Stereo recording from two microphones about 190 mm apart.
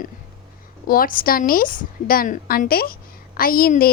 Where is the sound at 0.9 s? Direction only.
50° left (ahead or behind).